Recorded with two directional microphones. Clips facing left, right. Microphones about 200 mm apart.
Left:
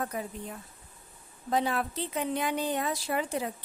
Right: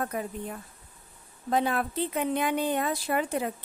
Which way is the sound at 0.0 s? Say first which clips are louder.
Right 3 dB; 55° right (ahead or behind).